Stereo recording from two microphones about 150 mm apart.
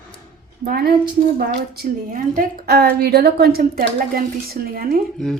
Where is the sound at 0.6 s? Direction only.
85° right.